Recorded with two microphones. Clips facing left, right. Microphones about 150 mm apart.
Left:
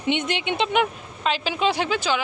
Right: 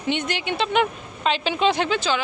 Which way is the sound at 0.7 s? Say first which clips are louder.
Right 1 dB; 5° left (ahead or behind).